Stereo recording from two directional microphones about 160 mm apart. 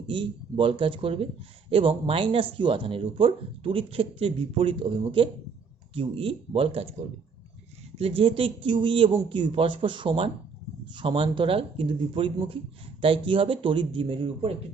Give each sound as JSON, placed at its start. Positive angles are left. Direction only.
{"t": 0.1, "sound": "speech", "side_deg": -30}
{"t": 7.9, "sound": "speech", "side_deg": -40}